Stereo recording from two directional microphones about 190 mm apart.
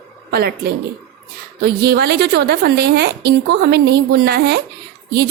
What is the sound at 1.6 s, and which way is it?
A woman's voice, 55° right (ahead or behind).